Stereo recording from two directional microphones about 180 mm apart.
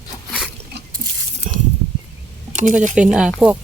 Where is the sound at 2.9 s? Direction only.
5° right (ahead or behind).